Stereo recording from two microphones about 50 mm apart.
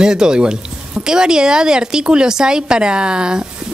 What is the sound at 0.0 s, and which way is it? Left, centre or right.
Speech, centre.